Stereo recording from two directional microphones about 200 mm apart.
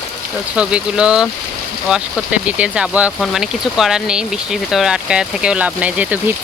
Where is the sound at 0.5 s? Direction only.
5° right (ahead or behind).